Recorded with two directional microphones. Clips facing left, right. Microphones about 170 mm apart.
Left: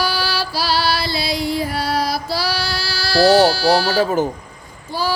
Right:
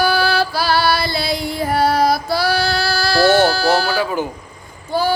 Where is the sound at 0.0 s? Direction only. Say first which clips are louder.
Right 5 dB; 55° right (ahead or behind).